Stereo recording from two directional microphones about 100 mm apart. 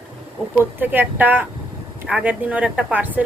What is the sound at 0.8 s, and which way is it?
A woman's voice, 15° right (ahead or behind).